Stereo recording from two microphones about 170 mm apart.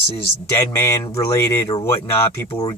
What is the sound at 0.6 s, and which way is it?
Speech, 20° left (ahead or behind).